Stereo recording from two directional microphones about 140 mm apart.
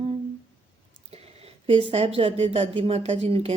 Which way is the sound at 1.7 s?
40° right (ahead or behind).